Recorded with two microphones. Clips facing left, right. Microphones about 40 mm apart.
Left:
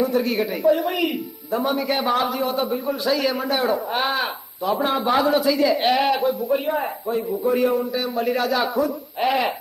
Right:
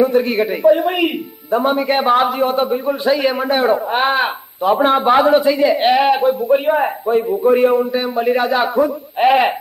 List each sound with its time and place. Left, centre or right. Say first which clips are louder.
0.0 s a man's voice: right 6 dB; right